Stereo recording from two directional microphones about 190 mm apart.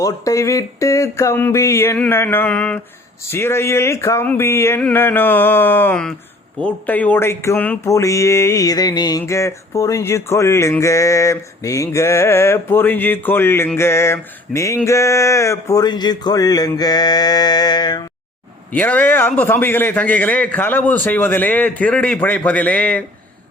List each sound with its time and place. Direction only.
0.0 s speech: 15° left (ahead or behind)
18.7 s speech: 10° left (ahead or behind)